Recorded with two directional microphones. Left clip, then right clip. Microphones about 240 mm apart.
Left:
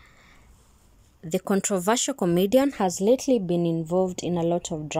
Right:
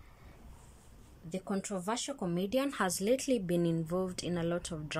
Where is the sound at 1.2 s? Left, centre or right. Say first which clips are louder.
Left 13 dB; left.